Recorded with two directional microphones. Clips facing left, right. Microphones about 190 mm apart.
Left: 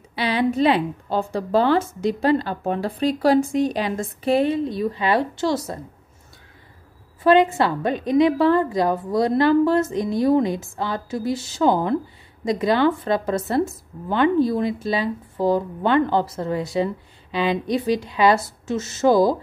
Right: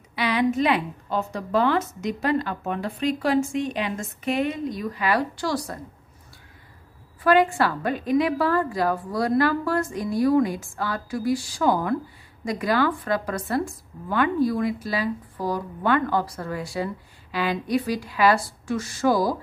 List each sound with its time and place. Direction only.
0.1 s a woman's voice: 30° left (ahead or behind)
7.2 s speech: 20° left (ahead or behind)